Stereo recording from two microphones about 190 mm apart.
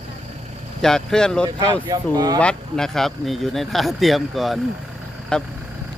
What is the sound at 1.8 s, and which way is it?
Speech, 20° right (ahead or behind).